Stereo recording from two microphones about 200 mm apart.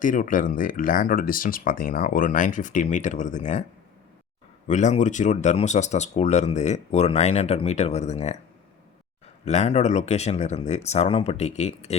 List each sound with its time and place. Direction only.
0.0 s speech: 40° left (ahead or behind)
4.7 s speech: 35° left (ahead or behind)
9.4 s speech: 35° left (ahead or behind)